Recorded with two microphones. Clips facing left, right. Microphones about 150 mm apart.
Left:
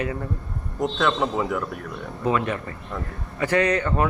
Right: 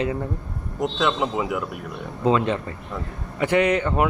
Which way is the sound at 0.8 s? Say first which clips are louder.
Even; centre (ahead or behind).